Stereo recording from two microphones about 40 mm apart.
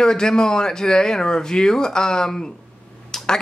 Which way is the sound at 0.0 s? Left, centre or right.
Centre.